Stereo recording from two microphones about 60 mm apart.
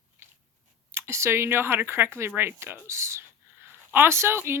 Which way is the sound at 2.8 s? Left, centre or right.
Right.